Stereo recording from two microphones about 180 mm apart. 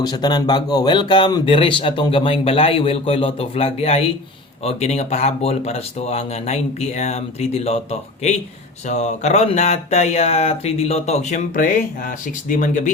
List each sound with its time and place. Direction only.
0.0 s speech: 20° left (ahead or behind)
8.9 s speech: 40° left (ahead or behind)